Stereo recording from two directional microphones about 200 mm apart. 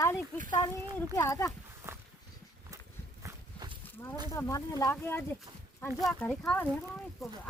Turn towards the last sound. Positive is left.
turn(degrees=10)  # may be behind; listen again after turning